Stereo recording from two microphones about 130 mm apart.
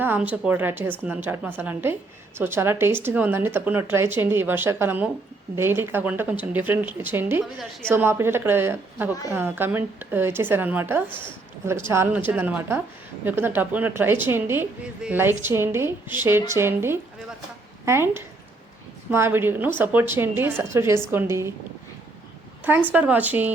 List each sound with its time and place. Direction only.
0.0 s a woman's voice: 15° right (ahead or behind)
22.9 s speech: 10° right (ahead or behind)